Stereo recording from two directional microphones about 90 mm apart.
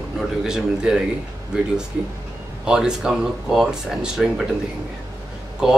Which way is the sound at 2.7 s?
5° right (ahead or behind).